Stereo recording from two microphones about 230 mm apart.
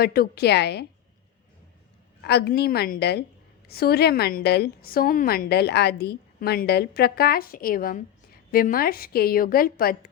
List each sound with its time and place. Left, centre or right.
0.0 s a woman's voice: left
2.2 s a woman's voice: left